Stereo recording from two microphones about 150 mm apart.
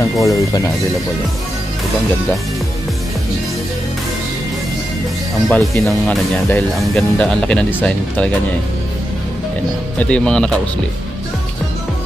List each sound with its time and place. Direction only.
0.0 s speech: 20° left (ahead or behind)
5.5 s speech: 5° left (ahead or behind)
9.9 s speech: 5° left (ahead or behind)